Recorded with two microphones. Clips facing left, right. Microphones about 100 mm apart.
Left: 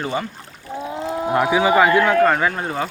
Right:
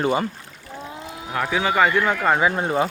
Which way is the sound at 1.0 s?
35° left (ahead or behind).